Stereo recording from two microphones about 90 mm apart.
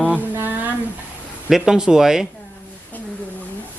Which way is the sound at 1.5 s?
5° right (ahead or behind).